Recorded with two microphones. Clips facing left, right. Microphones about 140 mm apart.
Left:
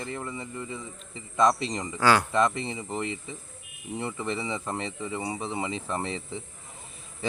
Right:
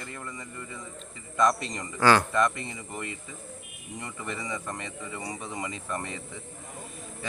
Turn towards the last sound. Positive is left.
turn(degrees=25)  # may be behind; listen again after turning